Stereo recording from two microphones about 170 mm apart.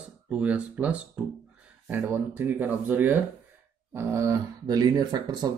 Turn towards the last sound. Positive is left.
turn(degrees=-25)  # may be behind; listen again after turning